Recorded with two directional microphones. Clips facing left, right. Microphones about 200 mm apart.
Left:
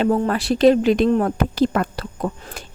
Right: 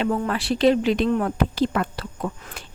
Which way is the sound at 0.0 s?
40° left (ahead or behind).